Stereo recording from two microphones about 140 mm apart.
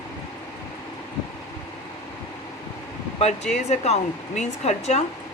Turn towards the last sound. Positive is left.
turn(degrees=55)  # may be behind; listen again after turning